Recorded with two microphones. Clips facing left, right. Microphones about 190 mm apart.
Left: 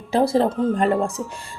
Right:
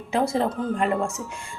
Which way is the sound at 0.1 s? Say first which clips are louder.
Left 5 dB; 35° left (ahead or behind).